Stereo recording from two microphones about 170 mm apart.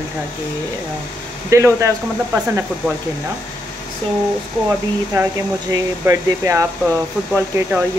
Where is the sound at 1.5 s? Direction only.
15° right (ahead or behind).